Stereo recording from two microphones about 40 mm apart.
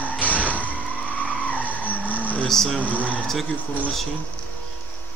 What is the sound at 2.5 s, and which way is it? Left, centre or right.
Speech, centre.